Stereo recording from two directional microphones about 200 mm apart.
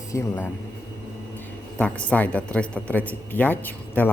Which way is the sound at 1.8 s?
5° left (ahead or behind).